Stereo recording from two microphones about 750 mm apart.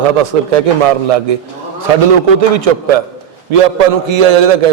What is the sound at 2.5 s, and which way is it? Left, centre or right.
A man's voice, right.